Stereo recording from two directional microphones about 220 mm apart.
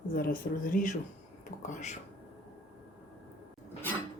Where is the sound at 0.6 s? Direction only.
35° left (ahead or behind).